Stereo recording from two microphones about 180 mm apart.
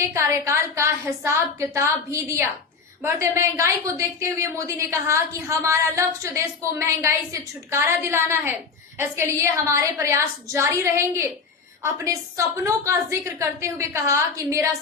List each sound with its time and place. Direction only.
0.0 s a woman's voice: 15° right (ahead or behind)